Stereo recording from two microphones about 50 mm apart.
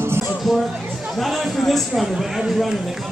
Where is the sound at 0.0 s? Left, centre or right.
Right.